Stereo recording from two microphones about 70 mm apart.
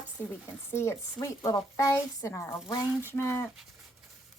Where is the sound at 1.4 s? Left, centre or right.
Left.